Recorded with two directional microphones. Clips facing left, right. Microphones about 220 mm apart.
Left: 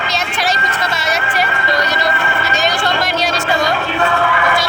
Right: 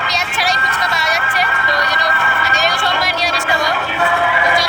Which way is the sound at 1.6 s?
25° left (ahead or behind).